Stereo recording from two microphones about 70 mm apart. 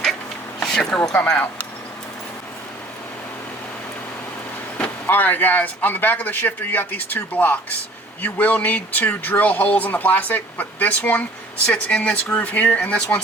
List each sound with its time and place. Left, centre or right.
0.6 s a sound: centre
1.1 s speech: left
5.0 s speech: left